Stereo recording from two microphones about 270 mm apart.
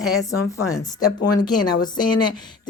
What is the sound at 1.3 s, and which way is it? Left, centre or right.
Speech, centre.